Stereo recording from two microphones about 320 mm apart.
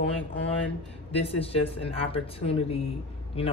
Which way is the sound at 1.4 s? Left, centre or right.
Centre.